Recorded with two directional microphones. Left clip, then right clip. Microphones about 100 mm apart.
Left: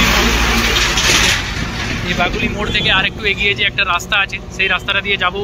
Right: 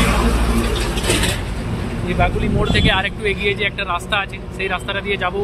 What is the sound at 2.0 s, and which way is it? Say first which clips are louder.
Speech: left 1 dB; 10° right (ahead or behind).